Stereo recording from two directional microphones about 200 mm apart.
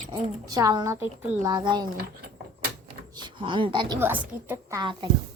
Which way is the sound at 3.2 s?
25° right (ahead or behind).